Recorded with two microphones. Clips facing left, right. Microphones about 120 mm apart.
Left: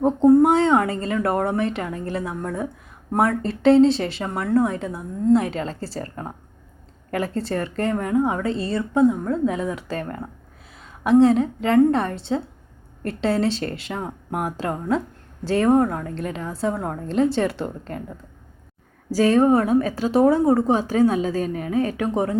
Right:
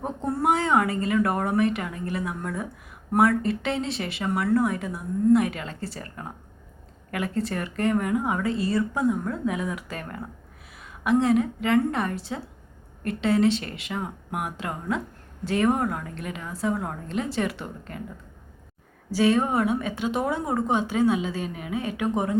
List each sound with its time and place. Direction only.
0.0 s a woman's voice: 30° left (ahead or behind)
19.1 s a woman's voice: 40° left (ahead or behind)